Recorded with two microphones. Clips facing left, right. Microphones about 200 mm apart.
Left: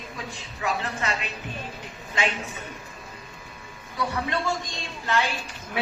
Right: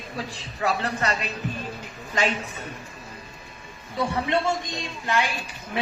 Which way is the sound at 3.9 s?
25° right (ahead or behind).